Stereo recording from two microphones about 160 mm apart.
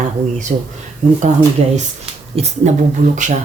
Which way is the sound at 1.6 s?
40° right (ahead or behind).